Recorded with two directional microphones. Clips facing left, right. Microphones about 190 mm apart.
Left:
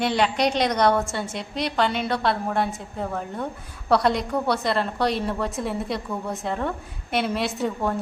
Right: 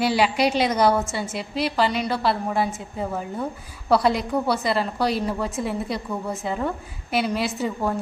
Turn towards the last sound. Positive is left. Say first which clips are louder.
# even
turn(degrees=0)  # may be behind; listen again after turning